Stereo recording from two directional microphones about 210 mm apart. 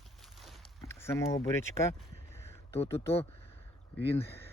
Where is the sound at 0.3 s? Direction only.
Centre (ahead or behind).